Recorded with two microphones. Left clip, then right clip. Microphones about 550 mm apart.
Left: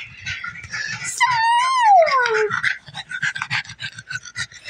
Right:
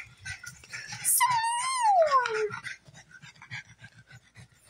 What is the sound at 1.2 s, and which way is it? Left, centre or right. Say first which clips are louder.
Dog: left 10 dB; right.